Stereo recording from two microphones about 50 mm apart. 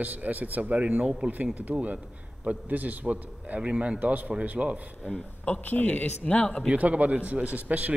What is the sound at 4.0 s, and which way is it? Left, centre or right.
Speech, right.